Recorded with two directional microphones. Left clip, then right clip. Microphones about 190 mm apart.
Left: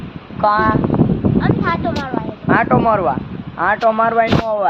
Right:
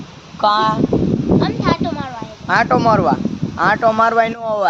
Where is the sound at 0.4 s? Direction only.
15° right (ahead or behind).